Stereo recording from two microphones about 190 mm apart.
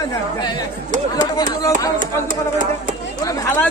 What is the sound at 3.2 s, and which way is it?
Speech, 15° left (ahead or behind).